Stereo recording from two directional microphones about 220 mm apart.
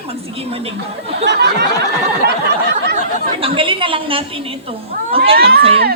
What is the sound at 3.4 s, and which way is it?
Speech, 25° right (ahead or behind).